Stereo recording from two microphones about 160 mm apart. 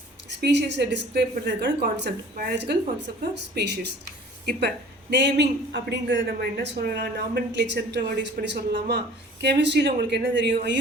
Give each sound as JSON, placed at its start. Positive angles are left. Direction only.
{"t": 0.3, "sound": "a woman's voice", "side_deg": -90}
{"t": 5.1, "sound": "a woman's voice", "side_deg": -90}